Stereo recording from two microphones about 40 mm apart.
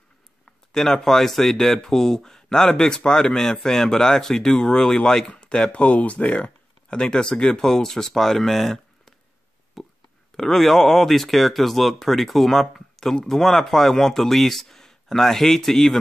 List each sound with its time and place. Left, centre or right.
0.5 s speech: centre
9.8 s a sound: centre
10.3 s speech: centre